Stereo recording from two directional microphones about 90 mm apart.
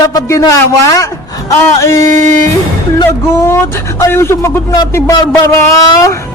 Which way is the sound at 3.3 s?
30° left (ahead or behind).